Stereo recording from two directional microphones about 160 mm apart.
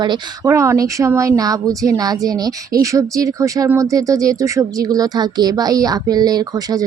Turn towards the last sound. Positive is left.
turn(degrees=-25)  # may be behind; listen again after turning